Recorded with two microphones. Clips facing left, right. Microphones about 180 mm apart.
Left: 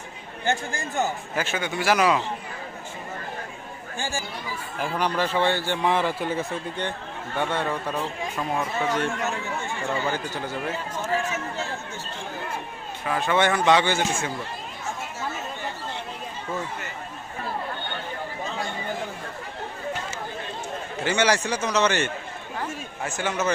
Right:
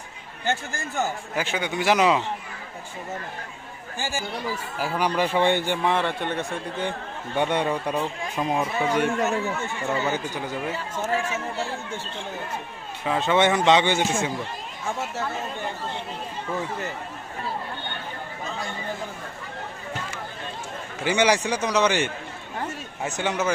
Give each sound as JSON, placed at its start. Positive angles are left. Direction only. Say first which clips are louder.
{"t": 1.4, "sound": "a man's voice", "louder": "right 1 dB", "side_deg": -15}
{"t": 3.9, "sound": "a man's voice", "louder": "right 2 dB", "side_deg": -5}
{"t": 5.8, "sound": "speech", "louder": "even", "side_deg": 0}
{"t": 7.3, "sound": "a man's voice", "louder": "right 3 dB", "side_deg": -20}
{"t": 13.1, "sound": "a man's voice", "louder": "right 2 dB", "side_deg": -20}
{"t": 21.0, "sound": "a man's voice", "louder": "right 2 dB", "side_deg": -15}